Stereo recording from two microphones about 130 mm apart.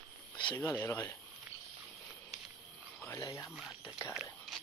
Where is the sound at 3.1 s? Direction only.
25° left (ahead or behind).